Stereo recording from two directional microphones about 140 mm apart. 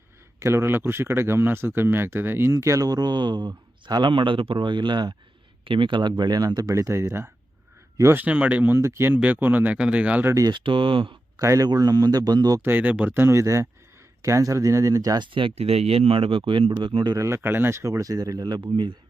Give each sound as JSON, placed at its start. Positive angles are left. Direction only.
{"t": 0.3, "sound": "speech", "side_deg": -20}
{"t": 10.3, "sound": "speech", "side_deg": -25}
{"t": 10.6, "sound": "speech", "side_deg": -35}
{"t": 11.3, "sound": "speech", "side_deg": -20}
{"t": 12.7, "sound": "speech", "side_deg": -10}
{"t": 15.3, "sound": "speech", "side_deg": -40}
{"t": 17.2, "sound": "speech", "side_deg": -15}